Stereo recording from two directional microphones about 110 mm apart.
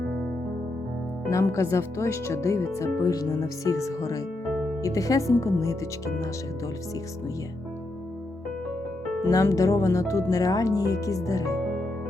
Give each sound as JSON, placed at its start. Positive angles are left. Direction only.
{"t": 1.3, "sound": "speech", "side_deg": 25}
{"t": 9.3, "sound": "speech", "side_deg": 30}